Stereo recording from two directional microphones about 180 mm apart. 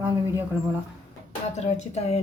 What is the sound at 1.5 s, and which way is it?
Speech, 40° left (ahead or behind).